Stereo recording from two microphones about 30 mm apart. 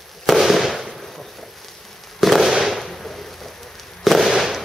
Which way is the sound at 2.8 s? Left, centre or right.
Centre.